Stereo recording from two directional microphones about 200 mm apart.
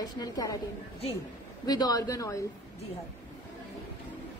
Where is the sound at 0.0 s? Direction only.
20° left (ahead or behind).